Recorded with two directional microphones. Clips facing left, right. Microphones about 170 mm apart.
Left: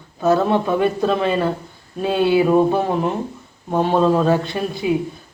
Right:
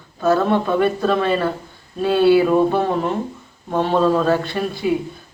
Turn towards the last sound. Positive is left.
turn(degrees=20)  # may be behind; listen again after turning